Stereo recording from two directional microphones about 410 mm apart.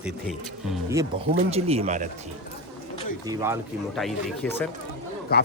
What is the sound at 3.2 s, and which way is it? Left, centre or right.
Speech, centre.